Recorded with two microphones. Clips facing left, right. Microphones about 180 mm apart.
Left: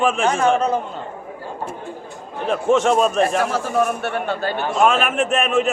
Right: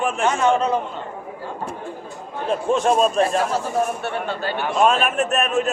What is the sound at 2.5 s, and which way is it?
A man's voice, 75° left (ahead or behind).